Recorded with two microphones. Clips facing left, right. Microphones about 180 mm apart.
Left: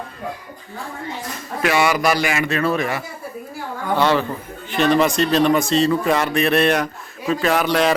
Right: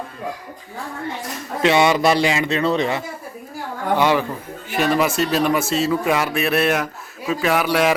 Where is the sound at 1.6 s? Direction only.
25° right (ahead or behind).